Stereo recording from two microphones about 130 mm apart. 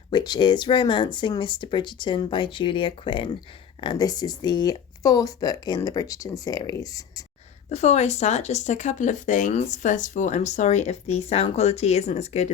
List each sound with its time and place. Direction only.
0.1 s speech: 35° left (ahead or behind)
7.7 s speech: 60° left (ahead or behind)